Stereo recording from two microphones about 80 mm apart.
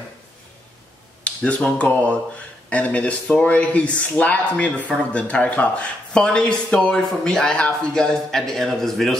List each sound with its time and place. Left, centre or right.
1.2 s speech: centre